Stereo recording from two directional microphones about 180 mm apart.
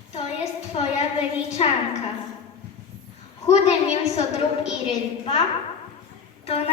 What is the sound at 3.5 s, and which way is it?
Speech, 35° left (ahead or behind).